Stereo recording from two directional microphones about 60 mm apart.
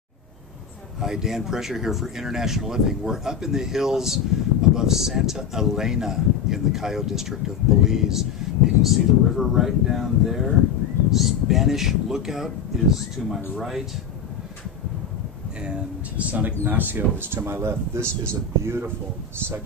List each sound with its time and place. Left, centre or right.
1.0 s speech: centre
15.6 s speech: centre; by 18.9 s right